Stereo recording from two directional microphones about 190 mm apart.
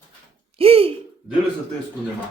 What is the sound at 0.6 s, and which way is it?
Speech, 30° right (ahead or behind).